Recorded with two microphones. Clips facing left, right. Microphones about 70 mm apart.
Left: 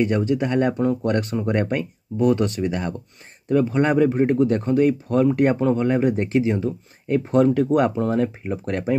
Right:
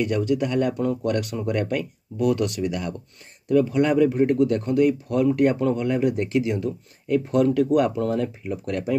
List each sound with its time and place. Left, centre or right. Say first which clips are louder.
0.0 s speech: left 2 dB; left